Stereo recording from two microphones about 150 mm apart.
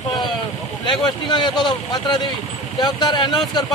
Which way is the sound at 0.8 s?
30° left (ahead or behind).